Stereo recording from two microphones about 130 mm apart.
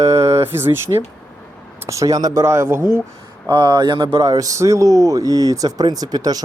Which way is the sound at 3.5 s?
35° right (ahead or behind).